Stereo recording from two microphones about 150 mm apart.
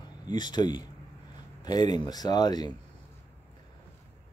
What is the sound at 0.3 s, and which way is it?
Speech, 30° left (ahead or behind).